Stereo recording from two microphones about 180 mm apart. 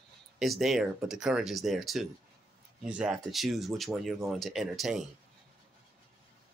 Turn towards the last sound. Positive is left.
turn(degrees=0)  # may be behind; listen again after turning